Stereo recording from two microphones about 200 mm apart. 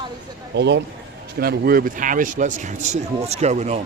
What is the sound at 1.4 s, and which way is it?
A man's voice, 50° right (ahead or behind).